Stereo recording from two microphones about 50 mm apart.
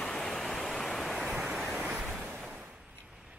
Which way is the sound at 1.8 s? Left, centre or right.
Right.